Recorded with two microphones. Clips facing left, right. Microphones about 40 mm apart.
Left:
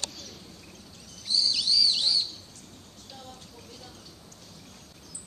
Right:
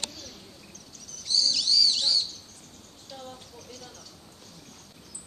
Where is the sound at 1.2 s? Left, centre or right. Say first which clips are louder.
Right 1 dB; centre.